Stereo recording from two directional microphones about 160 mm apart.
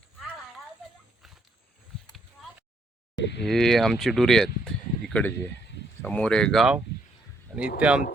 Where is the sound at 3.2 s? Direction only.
90° left.